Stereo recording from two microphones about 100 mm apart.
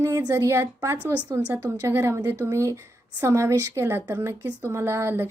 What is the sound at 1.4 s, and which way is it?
A woman's voice, 15° right (ahead or behind).